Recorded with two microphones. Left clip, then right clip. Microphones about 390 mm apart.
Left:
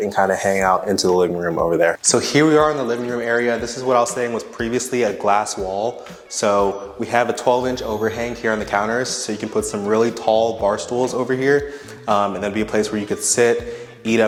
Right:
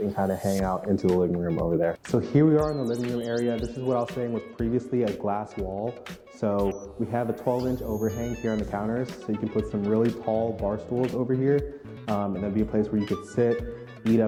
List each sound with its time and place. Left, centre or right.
0.2 s speech: centre
7.4 s speech: centre